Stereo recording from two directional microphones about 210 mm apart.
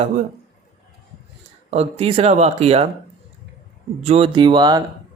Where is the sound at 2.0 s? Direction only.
30° right (ahead or behind).